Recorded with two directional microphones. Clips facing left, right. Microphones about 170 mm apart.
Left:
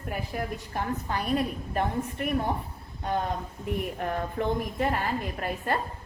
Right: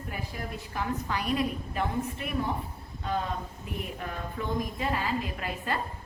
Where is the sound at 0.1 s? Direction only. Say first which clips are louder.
Left 6 dB; 50° left (ahead or behind).